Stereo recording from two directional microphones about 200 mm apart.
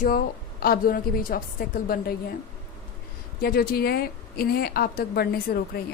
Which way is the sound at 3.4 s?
50° left (ahead or behind).